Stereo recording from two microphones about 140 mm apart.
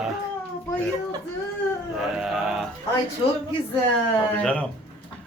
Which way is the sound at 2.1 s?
Centre (ahead or behind).